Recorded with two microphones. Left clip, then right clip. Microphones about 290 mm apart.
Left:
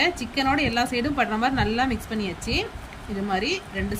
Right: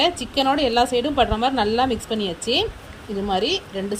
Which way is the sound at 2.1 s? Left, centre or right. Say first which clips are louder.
Right 5 dB; centre.